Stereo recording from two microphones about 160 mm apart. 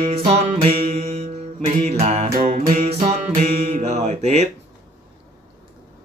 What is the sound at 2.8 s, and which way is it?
Music, 40° right (ahead or behind).